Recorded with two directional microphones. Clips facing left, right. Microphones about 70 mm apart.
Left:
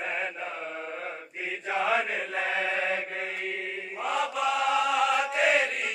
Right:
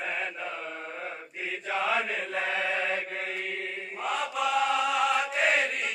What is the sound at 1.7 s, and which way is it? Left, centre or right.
Mantra, centre.